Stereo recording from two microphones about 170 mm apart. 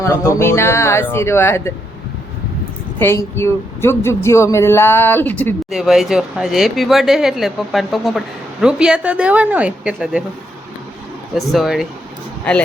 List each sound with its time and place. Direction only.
0.0 s speech: 15° left (ahead or behind)
3.0 s speech: 15° left (ahead or behind)
5.7 s a woman's voice: centre (ahead or behind)
11.3 s speech: centre (ahead or behind)